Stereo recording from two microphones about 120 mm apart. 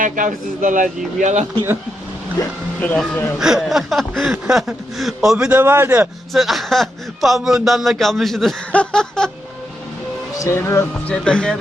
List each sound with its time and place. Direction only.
0.0 s a man's voice: 90° right
2.8 s speech: 10° left (ahead or behind)
3.3 s speech: 5° right (ahead or behind)
5.5 s a man's voice: 20° right (ahead or behind)
6.3 s speech: centre (ahead or behind)
10.4 s speech: 20° left (ahead or behind)
11.1 s speech: 10° left (ahead or behind)